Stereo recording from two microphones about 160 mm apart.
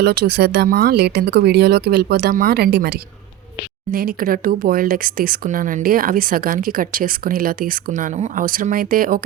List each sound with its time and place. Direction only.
0.0 s speech: 90° right
3.9 s speech: 65° right (ahead or behind)